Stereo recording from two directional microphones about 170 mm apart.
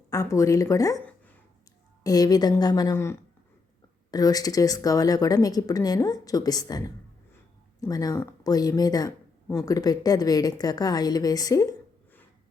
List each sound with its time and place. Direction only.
0.1 s speech: 20° left (ahead or behind)
1.0 s a sound: 10° left (ahead or behind)
2.0 s speech: 20° left (ahead or behind)